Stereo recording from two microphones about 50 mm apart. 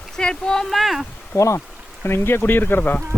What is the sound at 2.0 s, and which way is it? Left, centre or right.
Speech, left.